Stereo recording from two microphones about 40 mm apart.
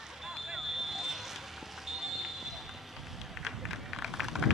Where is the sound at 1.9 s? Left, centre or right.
Centre.